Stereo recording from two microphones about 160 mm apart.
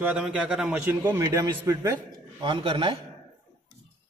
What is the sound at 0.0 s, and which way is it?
A man's voice, 5° right (ahead or behind).